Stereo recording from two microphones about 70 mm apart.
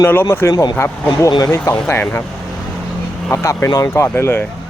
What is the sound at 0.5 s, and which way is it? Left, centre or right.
Speech, left.